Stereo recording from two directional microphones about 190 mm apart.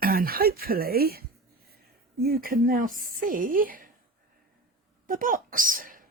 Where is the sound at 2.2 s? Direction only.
50° right (ahead or behind).